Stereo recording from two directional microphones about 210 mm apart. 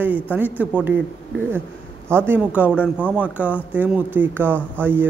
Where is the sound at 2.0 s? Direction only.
10° right (ahead or behind).